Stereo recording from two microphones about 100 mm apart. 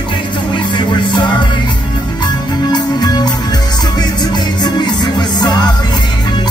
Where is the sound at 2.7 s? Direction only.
45° left (ahead or behind).